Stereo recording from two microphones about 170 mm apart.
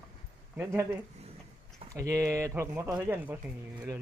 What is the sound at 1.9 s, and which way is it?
Speech, 20° right (ahead or behind).